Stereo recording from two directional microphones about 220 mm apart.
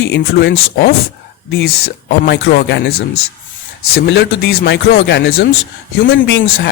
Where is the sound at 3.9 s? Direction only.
50° left (ahead or behind).